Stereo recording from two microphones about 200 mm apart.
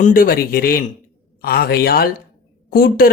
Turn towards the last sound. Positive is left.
turn(degrees=45)  # may be behind; listen again after turning